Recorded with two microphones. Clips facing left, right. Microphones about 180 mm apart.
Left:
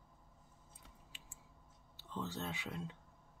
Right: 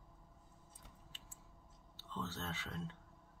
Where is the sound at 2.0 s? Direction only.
15° left (ahead or behind).